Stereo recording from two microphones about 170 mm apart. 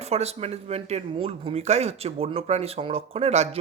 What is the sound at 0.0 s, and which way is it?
Speech, 40° right (ahead or behind).